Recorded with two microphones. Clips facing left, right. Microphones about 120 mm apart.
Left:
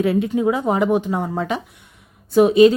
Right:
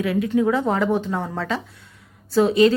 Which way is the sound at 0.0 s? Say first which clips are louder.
Left 2 dB; 25° left (ahead or behind).